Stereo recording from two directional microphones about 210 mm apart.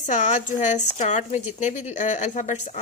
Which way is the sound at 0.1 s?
35° left (ahead or behind).